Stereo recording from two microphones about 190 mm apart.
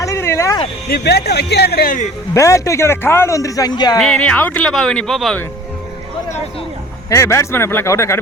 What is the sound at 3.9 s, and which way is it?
Speech, 5° left (ahead or behind).